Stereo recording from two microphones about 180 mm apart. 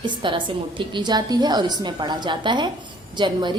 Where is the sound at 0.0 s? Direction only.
25° right (ahead or behind).